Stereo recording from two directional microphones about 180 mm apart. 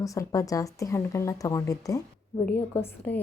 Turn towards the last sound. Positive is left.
turn(degrees=10)  # may be behind; listen again after turning